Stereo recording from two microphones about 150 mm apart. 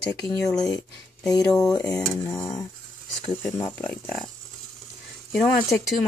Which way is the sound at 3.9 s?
Centre (ahead or behind).